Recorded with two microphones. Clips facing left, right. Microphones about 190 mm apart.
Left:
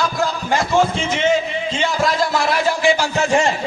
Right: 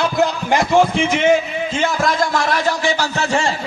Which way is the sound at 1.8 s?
Centre (ahead or behind).